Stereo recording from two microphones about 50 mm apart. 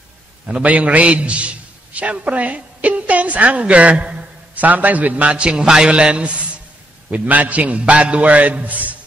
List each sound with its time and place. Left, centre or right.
0.7 s a man's voice: right